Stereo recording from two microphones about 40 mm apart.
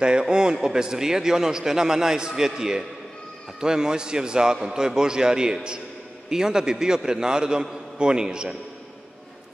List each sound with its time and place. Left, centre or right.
0.0 s a man's voice: right